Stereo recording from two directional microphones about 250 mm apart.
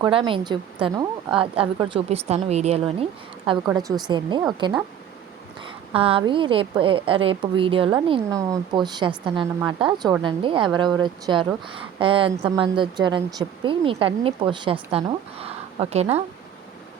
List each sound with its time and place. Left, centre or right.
0.0 s a woman's voice: centre
5.9 s speech: right